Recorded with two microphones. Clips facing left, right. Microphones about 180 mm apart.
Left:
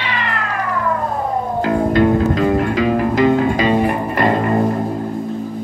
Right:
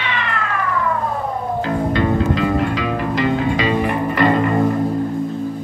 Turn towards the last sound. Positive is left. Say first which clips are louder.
# left 3 dB
turn(degrees=45)  # may be behind; listen again after turning